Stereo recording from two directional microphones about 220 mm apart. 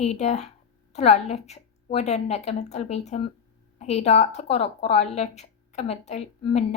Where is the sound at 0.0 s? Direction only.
30° left (ahead or behind).